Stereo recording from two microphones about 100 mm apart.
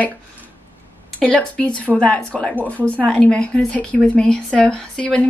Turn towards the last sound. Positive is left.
turn(degrees=15)  # may be behind; listen again after turning